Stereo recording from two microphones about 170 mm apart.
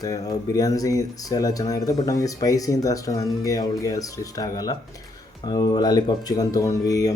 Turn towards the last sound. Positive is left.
turn(degrees=20)  # may be behind; listen again after turning